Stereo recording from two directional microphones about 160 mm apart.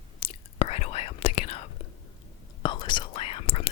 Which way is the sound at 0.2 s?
40° left (ahead or behind).